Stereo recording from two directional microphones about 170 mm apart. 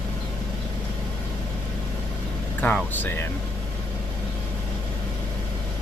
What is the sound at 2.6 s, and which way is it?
Speech, 10° left (ahead or behind).